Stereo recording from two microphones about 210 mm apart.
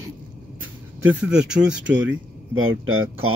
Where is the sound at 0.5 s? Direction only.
5° right (ahead or behind).